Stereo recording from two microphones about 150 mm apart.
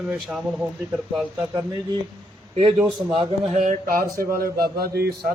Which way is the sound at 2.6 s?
45° right (ahead or behind).